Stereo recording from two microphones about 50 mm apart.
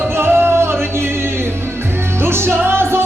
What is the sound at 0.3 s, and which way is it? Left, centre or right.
Music, right.